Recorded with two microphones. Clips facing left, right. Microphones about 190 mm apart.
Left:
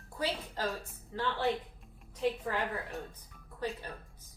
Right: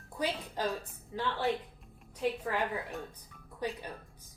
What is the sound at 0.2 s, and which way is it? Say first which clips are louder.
A woman's voice: right 1 dB; 15° right (ahead or behind).